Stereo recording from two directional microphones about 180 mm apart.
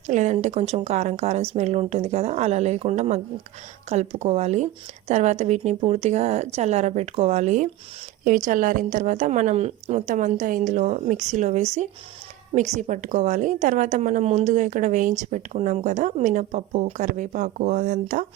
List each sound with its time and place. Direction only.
0.1 s a woman's voice: 40° right (ahead or behind)